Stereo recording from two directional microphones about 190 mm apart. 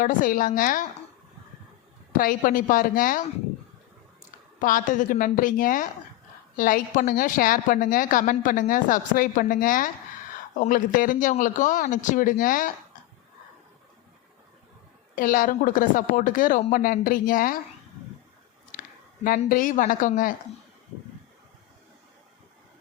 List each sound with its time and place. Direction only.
0.0 s a woman's voice: 45° left (ahead or behind)
2.1 s a woman's voice: 45° left (ahead or behind)
4.6 s a woman's voice: 45° left (ahead or behind)
15.1 s a woman's voice: 45° left (ahead or behind)
18.7 s a sound: 45° left (ahead or behind)
19.5 s a woman's voice: 45° left (ahead or behind)